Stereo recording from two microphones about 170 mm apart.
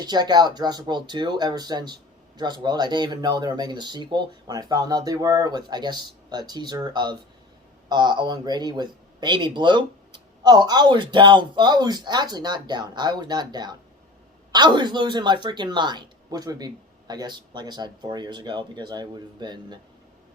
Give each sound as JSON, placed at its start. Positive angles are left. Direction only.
{"t": 0.0, "sound": "speech", "side_deg": -25}